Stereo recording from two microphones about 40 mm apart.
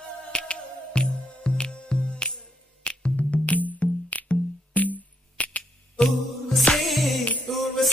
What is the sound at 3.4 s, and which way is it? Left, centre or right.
Music, left.